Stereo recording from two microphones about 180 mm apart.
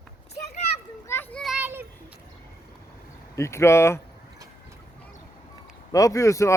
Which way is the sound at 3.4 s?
15° left (ahead or behind).